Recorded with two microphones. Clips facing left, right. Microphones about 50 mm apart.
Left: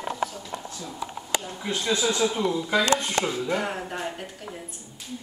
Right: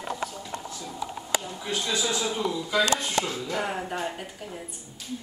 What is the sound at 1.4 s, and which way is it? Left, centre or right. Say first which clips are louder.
Speech: left 3 dB; left.